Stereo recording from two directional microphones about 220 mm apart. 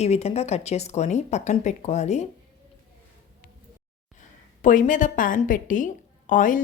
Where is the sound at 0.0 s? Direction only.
30° left (ahead or behind).